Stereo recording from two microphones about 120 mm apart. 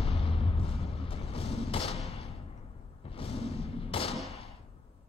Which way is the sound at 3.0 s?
50° left (ahead or behind).